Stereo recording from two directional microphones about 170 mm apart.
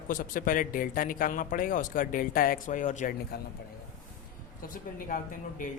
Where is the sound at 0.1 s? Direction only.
50° left (ahead or behind).